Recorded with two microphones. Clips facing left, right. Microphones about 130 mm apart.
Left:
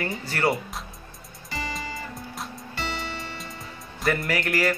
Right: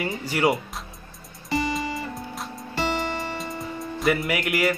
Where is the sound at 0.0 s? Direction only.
10° right (ahead or behind).